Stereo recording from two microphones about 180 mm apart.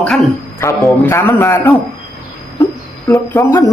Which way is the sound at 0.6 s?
15° left (ahead or behind).